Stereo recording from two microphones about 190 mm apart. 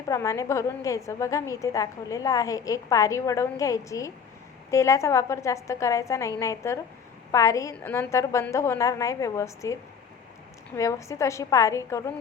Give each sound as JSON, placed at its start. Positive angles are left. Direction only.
{"t": 0.1, "sound": "a woman's voice", "side_deg": 15}
{"t": 10.8, "sound": "a woman's voice", "side_deg": 15}